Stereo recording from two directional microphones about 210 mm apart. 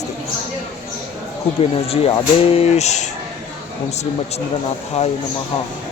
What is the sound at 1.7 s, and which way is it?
Speech, 25° left (ahead or behind).